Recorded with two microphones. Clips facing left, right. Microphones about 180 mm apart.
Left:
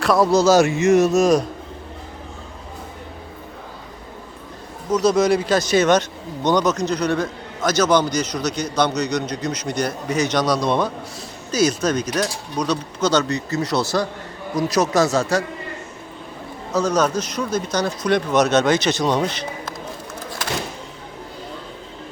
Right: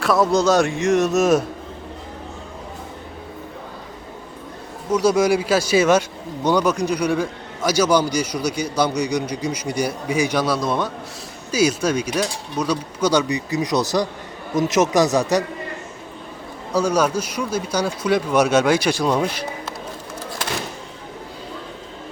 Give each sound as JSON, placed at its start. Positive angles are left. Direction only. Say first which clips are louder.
{"t": 0.0, "sound": "a man's voice", "louder": "left 2 dB", "side_deg": 0}
{"t": 4.9, "sound": "speech", "louder": "even", "side_deg": -10}
{"t": 16.7, "sound": "speech", "louder": "even", "side_deg": -10}